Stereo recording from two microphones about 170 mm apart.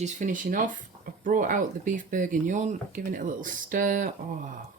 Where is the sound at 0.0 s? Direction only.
50° right (ahead or behind).